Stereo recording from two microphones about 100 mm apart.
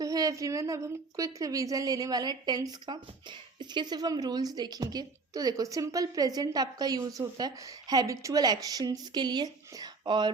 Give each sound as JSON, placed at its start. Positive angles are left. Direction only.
{"t": 0.0, "sound": "a woman's voice", "side_deg": -35}